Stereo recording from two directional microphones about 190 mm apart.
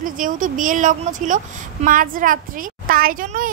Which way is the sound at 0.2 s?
45° right (ahead or behind).